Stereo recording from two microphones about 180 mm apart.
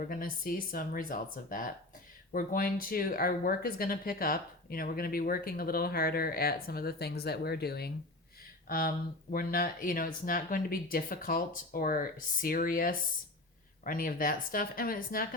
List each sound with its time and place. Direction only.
0.1 s speech: 55° left (ahead or behind)